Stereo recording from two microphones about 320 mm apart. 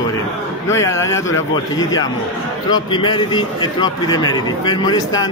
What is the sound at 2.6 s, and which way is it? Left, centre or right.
A man's voice, centre.